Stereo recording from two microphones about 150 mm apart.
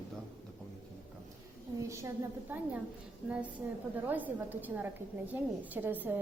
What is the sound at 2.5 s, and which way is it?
Speech, 10° right (ahead or behind).